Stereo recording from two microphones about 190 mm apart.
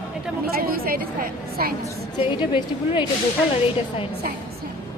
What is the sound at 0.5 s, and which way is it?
Speech, 50° right (ahead or behind).